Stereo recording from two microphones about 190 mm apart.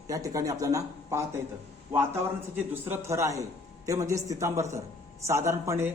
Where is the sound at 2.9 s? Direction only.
15° right (ahead or behind).